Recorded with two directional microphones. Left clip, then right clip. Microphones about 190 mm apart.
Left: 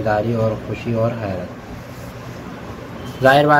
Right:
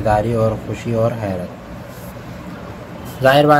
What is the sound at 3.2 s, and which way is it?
Speech, 15° right (ahead or behind).